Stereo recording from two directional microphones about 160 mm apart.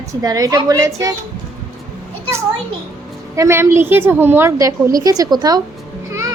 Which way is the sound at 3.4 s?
15° right (ahead or behind).